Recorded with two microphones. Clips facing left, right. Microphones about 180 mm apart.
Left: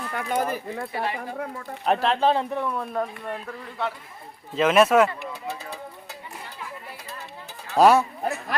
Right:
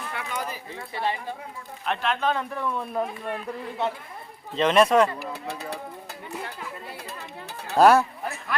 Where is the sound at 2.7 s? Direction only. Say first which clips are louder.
Even; 5° right (ahead or behind).